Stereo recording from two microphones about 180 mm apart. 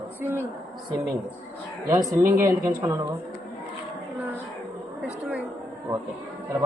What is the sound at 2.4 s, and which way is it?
Speech, 15° right (ahead or behind).